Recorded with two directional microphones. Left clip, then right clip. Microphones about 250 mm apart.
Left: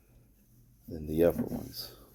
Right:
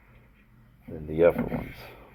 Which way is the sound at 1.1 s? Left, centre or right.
Left.